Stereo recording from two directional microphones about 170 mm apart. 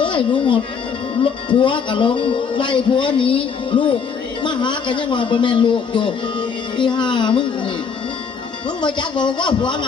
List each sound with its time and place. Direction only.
0.0 s speech: 30° left (ahead or behind)
9.0 s speech: 25° left (ahead or behind)